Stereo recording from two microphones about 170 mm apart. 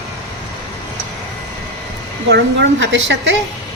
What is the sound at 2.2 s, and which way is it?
A woman's voice, 90° right.